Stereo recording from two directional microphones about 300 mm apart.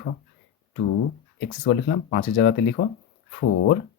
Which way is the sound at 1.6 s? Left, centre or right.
Left.